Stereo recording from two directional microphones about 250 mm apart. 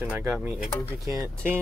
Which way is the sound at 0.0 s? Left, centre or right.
Centre.